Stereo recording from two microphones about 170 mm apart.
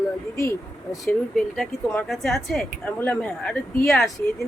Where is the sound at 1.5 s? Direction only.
Centre (ahead or behind).